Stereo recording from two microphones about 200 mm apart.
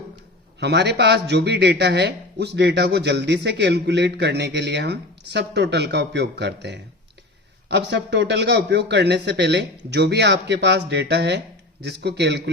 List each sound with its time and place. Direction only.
0.6 s speech: 55° right (ahead or behind)